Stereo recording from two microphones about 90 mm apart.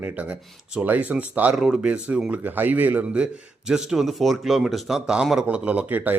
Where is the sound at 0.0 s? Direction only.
15° right (ahead or behind).